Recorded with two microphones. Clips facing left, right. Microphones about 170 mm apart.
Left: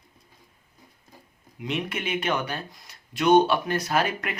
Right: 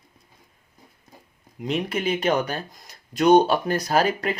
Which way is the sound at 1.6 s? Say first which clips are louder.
Right 4 dB; 35° right (ahead or behind).